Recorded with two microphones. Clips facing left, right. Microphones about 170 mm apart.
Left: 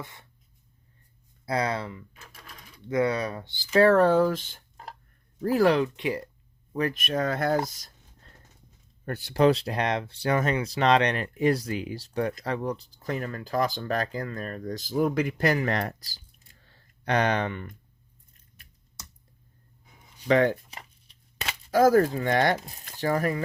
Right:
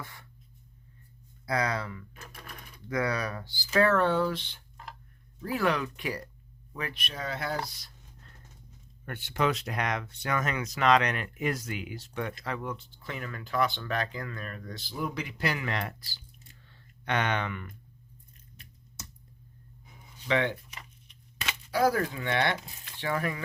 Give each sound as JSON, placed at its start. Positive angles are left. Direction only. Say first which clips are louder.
{"t": 0.0, "sound": "speech", "louder": "left 3 dB", "side_deg": 20}
{"t": 1.5, "sound": "speech", "louder": "left 2 dB", "side_deg": 30}
{"t": 6.7, "sound": "speech", "louder": "left 11 dB", "side_deg": 40}
{"t": 16.6, "sound": "a sound", "louder": "left 4 dB", "side_deg": 40}
{"t": 18.5, "sound": "scissors", "louder": "right 1 dB", "side_deg": -25}
{"t": 20.2, "sound": "speech", "louder": "left 7 dB", "side_deg": 40}